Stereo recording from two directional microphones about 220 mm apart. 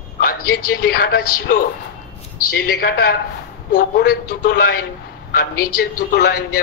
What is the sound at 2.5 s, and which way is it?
Speech, 50° left (ahead or behind).